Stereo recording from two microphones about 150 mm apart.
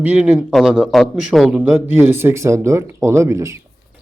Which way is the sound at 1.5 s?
15° right (ahead or behind).